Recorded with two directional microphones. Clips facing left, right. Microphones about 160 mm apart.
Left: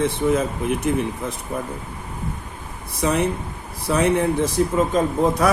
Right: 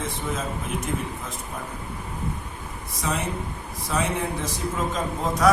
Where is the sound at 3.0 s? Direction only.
65° left (ahead or behind).